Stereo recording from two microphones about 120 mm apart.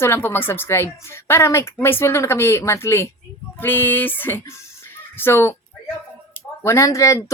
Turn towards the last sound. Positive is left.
turn(degrees=25)  # may be behind; listen again after turning